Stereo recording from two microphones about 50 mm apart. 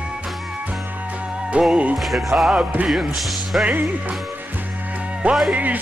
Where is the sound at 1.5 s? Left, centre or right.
Right.